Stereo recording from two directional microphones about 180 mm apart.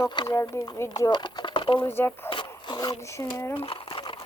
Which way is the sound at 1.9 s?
10° left (ahead or behind).